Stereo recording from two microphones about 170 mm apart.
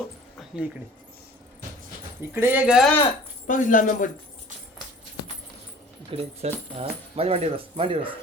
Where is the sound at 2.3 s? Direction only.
10° right (ahead or behind).